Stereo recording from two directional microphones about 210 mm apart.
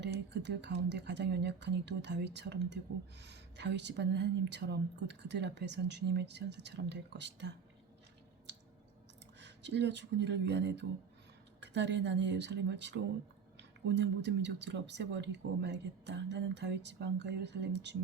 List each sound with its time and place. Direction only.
0.0 s a woman's voice: 55° right (ahead or behind)
9.4 s a woman's voice: 55° right (ahead or behind)